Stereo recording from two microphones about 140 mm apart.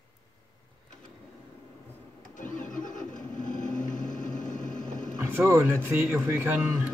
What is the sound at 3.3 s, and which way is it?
Vehicle, 65° left (ahead or behind).